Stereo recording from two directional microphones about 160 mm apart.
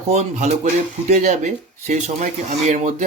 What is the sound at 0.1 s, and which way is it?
Speech, 45° right (ahead or behind).